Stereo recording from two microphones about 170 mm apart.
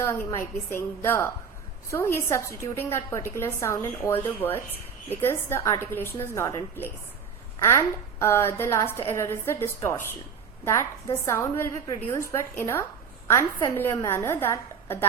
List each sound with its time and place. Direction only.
0.0 s a woman's voice: 15° left (ahead or behind)
13.2 s a woman's voice: 15° left (ahead or behind)